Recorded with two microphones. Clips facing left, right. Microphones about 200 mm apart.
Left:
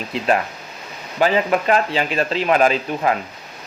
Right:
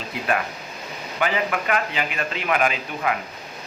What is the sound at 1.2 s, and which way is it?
A man's voice, 30° left (ahead or behind).